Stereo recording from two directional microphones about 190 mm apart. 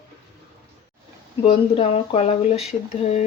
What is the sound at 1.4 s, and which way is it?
Speech, 30° left (ahead or behind).